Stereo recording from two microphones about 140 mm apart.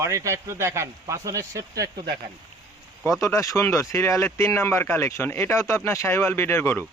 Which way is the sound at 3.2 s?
25° left (ahead or behind).